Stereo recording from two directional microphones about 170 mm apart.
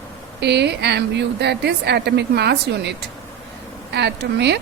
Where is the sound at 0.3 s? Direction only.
80° right.